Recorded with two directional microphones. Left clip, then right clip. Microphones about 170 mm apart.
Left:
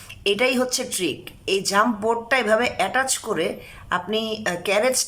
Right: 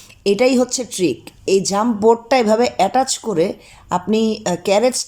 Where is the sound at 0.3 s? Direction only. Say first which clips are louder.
Right 5 dB; 25° right (ahead or behind).